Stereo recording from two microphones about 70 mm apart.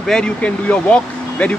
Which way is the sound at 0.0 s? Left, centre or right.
Centre.